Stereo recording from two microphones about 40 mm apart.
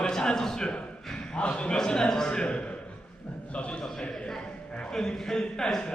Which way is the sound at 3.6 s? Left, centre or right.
Left.